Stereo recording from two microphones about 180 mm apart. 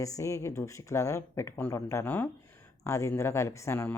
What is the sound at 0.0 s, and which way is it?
Speech, 15° left (ahead or behind).